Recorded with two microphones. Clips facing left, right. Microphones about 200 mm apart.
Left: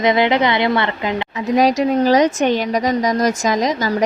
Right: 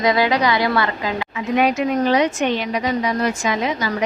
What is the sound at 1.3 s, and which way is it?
A woman's voice, 35° left (ahead or behind).